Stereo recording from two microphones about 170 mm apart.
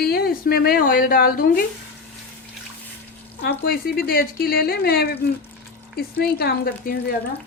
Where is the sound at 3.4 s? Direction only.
65° left (ahead or behind).